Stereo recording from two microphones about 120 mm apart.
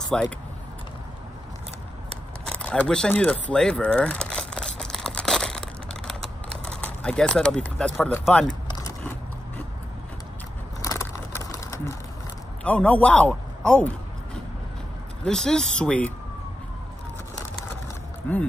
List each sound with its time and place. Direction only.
0.1 s speech: 5° left (ahead or behind)
2.4 s a sound: 10° left (ahead or behind)
6.6 s speech: 10° left (ahead or behind)
10.8 s a sound: 30° left (ahead or behind)
12.6 s a man's voice: 10° left (ahead or behind)
15.2 s speech: 5° left (ahead or behind)
18.3 s speech: 15° left (ahead or behind)